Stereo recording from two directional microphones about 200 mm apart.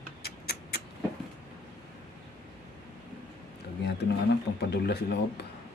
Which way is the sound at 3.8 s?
55° left (ahead or behind).